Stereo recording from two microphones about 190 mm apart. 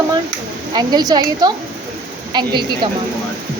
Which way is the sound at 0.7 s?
20° right (ahead or behind).